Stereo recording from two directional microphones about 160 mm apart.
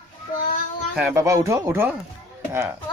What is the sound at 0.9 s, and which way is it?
Speech, 15° right (ahead or behind).